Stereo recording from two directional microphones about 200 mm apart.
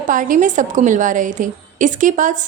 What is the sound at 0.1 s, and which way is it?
A woman's voice, 40° right (ahead or behind).